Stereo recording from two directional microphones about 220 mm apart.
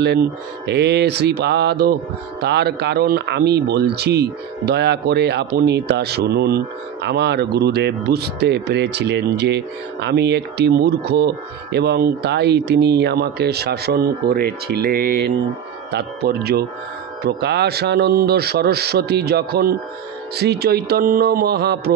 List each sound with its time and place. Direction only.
0.7 s speech: 50° right (ahead or behind)